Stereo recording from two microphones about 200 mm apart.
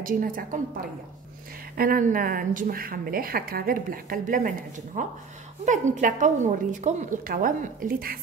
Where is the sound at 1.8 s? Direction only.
45° right (ahead or behind).